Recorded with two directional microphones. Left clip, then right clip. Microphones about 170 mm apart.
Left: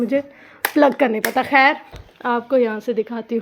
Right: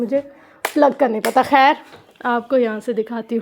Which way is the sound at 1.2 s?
15° right (ahead or behind).